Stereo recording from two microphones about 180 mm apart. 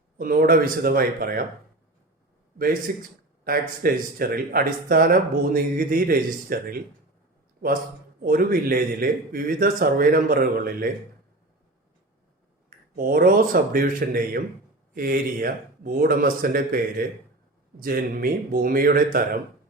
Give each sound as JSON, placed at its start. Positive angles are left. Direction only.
{"t": 0.2, "sound": "speech", "side_deg": -50}
{"t": 2.9, "sound": "speech", "side_deg": -45}
{"t": 3.4, "sound": "speech", "side_deg": -55}
{"t": 8.2, "sound": "speech", "side_deg": -55}
{"t": 13.0, "sound": "speech", "side_deg": -55}